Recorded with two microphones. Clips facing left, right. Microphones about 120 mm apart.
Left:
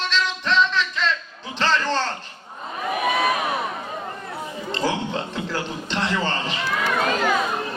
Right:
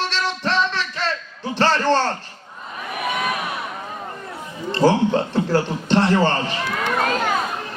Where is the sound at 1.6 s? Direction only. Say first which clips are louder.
Right 4 dB; 50° right (ahead or behind).